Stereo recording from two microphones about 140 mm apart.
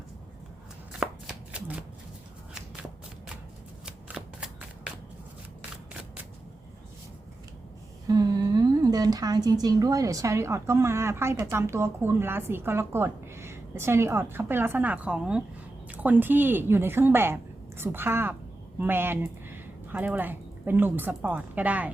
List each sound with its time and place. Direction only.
1.0 s shuffling cards: 5° right (ahead or behind)
3.8 s shuffling cards: 5° right (ahead or behind)
8.0 s a woman's voice: 30° right (ahead or behind); by 21.8 s 10° right (ahead or behind)